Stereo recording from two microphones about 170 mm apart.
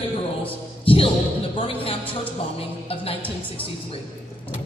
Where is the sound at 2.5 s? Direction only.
35° left (ahead or behind).